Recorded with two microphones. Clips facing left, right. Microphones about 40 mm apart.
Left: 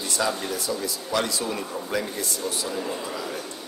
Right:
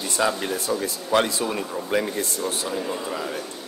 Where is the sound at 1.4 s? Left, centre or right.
Right.